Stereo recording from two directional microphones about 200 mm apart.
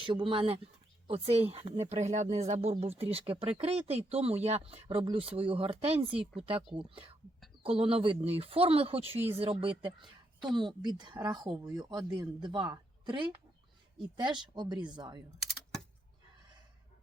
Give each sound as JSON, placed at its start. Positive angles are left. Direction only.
{"t": 0.0, "sound": "speech", "side_deg": -25}
{"t": 10.0, "sound": "a sound", "side_deg": 0}
{"t": 10.6, "sound": "speech", "side_deg": -20}